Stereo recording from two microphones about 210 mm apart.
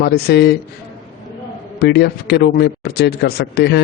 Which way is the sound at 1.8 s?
50° left (ahead or behind).